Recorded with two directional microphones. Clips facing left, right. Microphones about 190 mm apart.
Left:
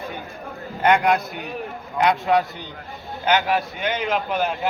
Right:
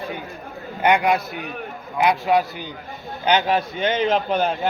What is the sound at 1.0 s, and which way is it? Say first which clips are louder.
A man's voice: even; centre (ahead or behind).